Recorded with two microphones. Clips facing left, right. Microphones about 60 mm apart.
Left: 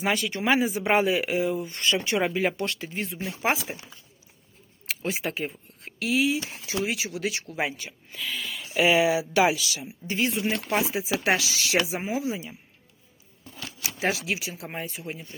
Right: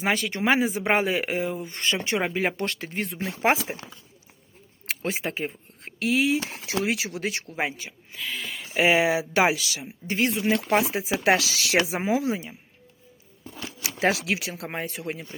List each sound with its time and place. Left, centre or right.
0.0 s speech: right
2.5 s speech: right
4.9 s speech: right
7.2 s speech: right
8.1 s speech: centre
8.4 s speech: right
12.0 s speech: right
13.8 s speech: right